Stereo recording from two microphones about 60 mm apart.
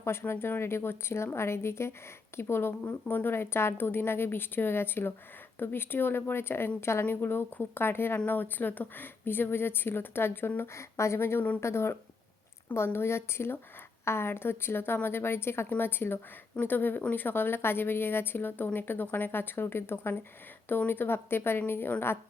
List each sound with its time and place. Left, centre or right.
0.0 s a woman's voice: left
10.8 s a woman's voice: left